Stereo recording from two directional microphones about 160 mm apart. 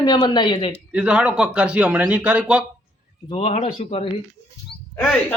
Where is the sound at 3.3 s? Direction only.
40° left (ahead or behind).